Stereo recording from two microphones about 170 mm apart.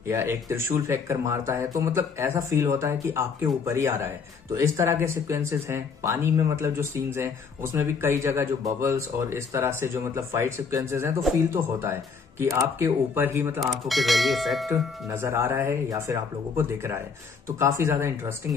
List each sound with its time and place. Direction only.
0.1 s speech: 15° right (ahead or behind)
13.6 s speech: centre (ahead or behind)
14.7 s speech: 15° right (ahead or behind)